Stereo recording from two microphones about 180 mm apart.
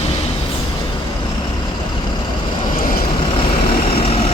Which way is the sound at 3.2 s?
30° left (ahead or behind).